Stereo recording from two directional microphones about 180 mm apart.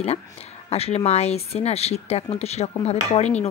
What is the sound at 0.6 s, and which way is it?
Speech, 35° left (ahead or behind).